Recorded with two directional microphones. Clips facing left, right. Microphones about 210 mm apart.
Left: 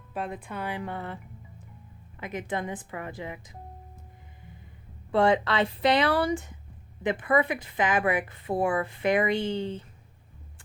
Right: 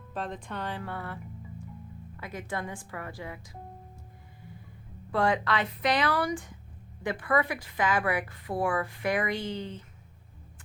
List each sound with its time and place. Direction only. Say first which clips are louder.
0.1 s a woman's voice: left 2 dB; 10° left (ahead or behind)
5.1 s a woman's voice: left 4 dB; 25° left (ahead or behind)